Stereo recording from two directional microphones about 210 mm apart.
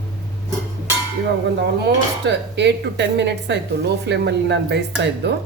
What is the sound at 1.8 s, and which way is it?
Speech, 55° right (ahead or behind).